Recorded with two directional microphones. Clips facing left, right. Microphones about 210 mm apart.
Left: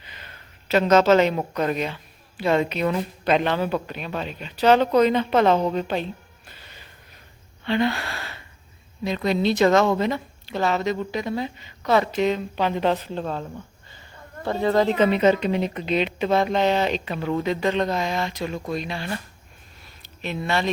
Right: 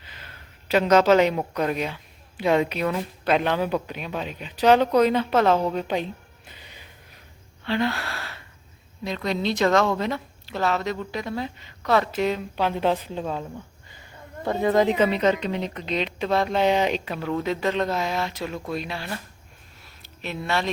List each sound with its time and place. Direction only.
0.0 s speech: 5° right (ahead or behind)
7.6 s gasp: centre (ahead or behind)
9.0 s a woman's voice: 5° left (ahead or behind)
14.4 s speech: 15° right (ahead or behind)
14.9 s a woman's voice: 5° right (ahead or behind)
15.2 s a woman's voice: 10° left (ahead or behind); by 17.2 s 10° right (ahead or behind)
17.2 s a woman's voice: centre (ahead or behind)